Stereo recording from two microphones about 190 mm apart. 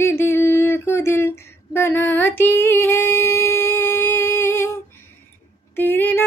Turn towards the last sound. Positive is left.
turn(degrees=10)  # may be behind; listen again after turning